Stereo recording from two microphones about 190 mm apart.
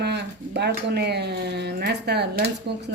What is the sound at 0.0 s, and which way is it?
A woman's voice, 60° right (ahead or behind).